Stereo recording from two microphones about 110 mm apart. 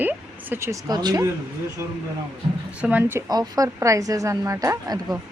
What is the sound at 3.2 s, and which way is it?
A woman's voice, 35° right (ahead or behind).